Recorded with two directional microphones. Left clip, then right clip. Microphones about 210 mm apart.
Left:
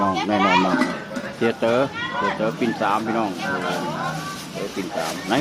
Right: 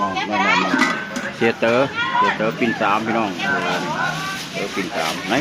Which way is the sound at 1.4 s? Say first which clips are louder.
Right 3 dB; centre (ahead or behind).